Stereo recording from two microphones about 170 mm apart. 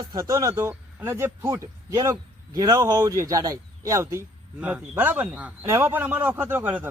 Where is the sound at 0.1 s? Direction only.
20° right (ahead or behind).